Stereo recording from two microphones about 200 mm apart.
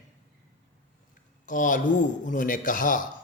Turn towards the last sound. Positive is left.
turn(degrees=40)  # may be behind; listen again after turning